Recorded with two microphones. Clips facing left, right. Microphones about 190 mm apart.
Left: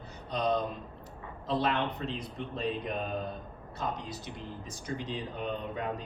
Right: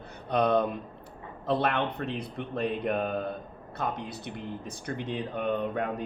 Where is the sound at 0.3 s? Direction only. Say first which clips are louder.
Right 6 dB; 60° right (ahead or behind).